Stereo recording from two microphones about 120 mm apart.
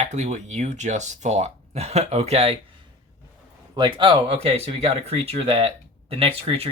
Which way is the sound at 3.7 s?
40° right (ahead or behind).